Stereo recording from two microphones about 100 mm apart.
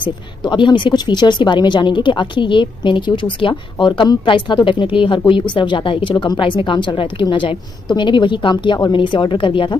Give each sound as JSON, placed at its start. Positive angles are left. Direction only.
{"t": 0.0, "sound": "a woman's voice", "side_deg": 50}